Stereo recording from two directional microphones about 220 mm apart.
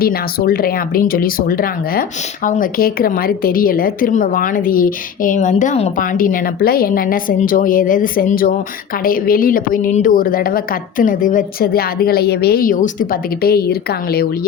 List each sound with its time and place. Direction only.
0.0 s speech: 45° left (ahead or behind)